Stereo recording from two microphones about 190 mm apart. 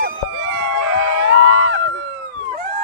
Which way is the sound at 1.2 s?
90° right.